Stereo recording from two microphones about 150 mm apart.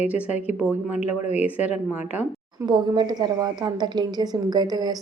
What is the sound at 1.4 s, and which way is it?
Speech, 10° right (ahead or behind).